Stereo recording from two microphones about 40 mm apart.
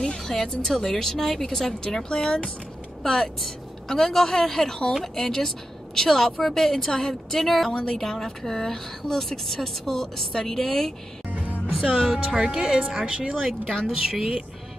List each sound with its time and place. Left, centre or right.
0.2 s speech: centre
2.0 s speech: left
3.0 s speech: centre
11.2 s music: right
12.0 s speech: centre
12.4 s speech: centre
13.8 s speech: centre